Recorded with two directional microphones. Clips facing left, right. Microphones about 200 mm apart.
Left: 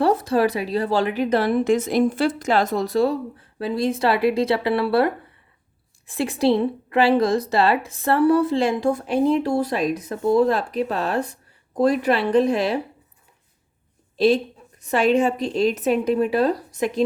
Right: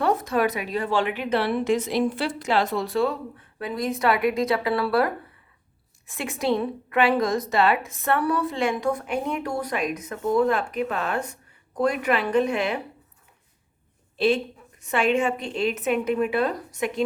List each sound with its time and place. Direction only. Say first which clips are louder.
0.0 s a woman's voice: left 4 dB; 30° left (ahead or behind)
14.2 s a woman's voice: left 4 dB; 35° left (ahead or behind)